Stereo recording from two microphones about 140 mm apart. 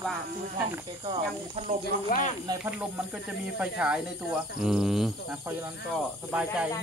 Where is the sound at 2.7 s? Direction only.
5° right (ahead or behind).